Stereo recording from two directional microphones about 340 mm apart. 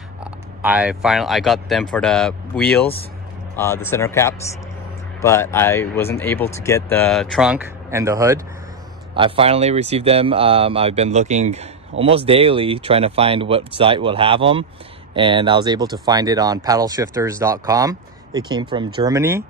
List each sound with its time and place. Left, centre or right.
0.2 s speech: centre